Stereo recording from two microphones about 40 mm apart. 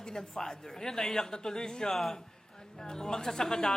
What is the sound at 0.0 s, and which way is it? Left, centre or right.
A man's voice, centre.